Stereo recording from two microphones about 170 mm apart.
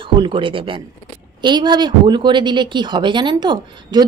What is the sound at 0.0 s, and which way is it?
Speech, 30° right (ahead or behind).